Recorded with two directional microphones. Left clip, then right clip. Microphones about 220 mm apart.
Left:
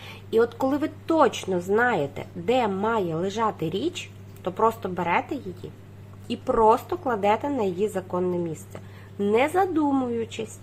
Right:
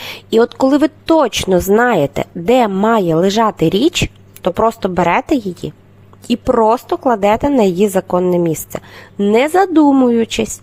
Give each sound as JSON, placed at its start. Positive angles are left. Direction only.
{"t": 0.0, "sound": "a woman's voice", "side_deg": -50}